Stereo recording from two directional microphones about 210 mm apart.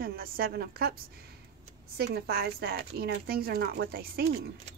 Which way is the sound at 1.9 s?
50° right (ahead or behind).